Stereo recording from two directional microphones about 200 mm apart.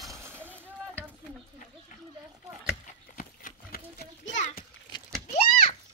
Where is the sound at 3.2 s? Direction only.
45° left (ahead or behind).